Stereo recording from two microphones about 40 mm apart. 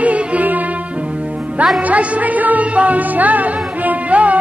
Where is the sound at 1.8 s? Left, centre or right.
Right.